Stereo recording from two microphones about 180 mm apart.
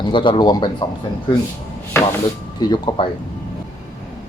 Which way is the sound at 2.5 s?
25° left (ahead or behind).